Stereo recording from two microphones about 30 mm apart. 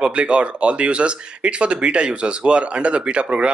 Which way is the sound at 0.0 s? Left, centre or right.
Right.